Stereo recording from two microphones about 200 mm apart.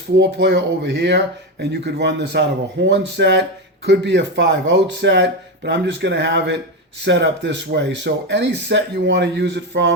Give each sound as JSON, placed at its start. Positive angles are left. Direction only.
{"t": 0.2, "sound": "speech", "side_deg": -60}